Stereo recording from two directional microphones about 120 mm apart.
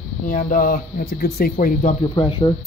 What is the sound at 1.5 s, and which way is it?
Speech, 90° left.